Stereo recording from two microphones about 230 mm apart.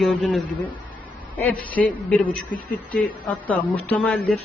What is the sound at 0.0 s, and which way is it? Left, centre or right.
A man's voice, centre.